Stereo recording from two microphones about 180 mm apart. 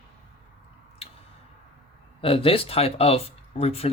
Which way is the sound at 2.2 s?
30° left (ahead or behind).